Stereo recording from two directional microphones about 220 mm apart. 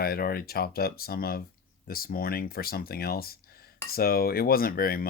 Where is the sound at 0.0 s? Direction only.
45° left (ahead or behind).